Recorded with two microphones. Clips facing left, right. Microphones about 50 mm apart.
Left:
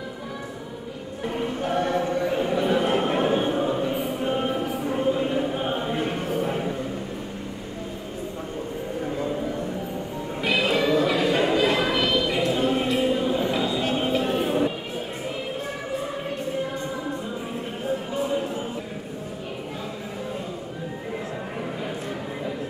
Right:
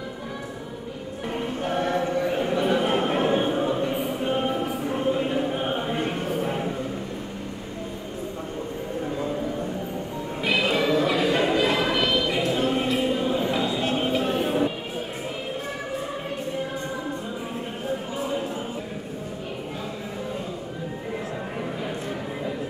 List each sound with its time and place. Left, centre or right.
1.2 s choir: centre
9.0 s train: centre
13.9 s music: centre
17.8 s a sound: centre